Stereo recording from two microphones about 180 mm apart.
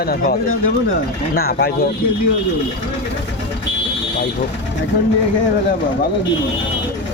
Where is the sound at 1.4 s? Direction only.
60° left (ahead or behind).